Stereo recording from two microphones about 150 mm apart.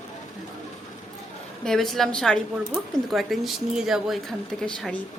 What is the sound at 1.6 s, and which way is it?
A woman's voice, centre (ahead or behind).